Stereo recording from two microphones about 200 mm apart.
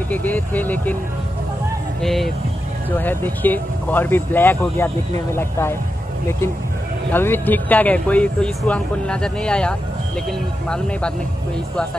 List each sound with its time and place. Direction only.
0.1 s speech: 10° left (ahead or behind)
2.0 s speech: centre (ahead or behind)
7.1 s speech: 10° left (ahead or behind)